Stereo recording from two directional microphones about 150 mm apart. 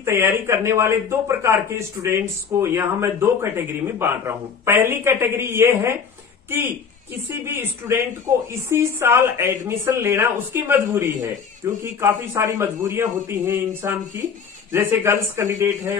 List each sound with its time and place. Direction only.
0.0 s a man's voice: 15° right (ahead or behind)